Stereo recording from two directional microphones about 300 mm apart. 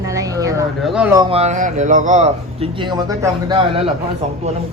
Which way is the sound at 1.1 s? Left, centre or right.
Centre.